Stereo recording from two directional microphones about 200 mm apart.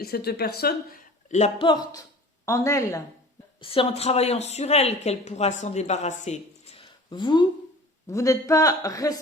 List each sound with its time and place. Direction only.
0.0 s a man's voice: 50° left (ahead or behind); by 3.0 s 15° left (ahead or behind)
3.6 s a man's voice: 25° left (ahead or behind)